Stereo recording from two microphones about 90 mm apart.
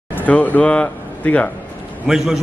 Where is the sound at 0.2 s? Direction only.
20° left (ahead or behind).